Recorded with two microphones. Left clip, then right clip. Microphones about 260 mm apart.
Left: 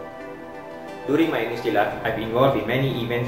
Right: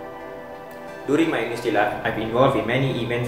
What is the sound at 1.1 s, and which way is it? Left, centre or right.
Speech, right.